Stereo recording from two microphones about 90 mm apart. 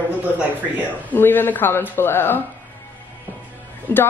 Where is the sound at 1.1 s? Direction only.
20° left (ahead or behind).